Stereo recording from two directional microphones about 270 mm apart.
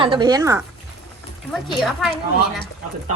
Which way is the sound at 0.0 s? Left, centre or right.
Centre.